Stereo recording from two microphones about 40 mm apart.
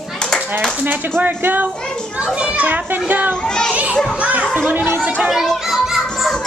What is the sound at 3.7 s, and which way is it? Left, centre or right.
Children playing, right.